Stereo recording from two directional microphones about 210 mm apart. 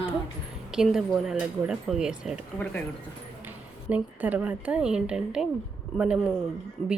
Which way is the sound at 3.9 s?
5° right (ahead or behind).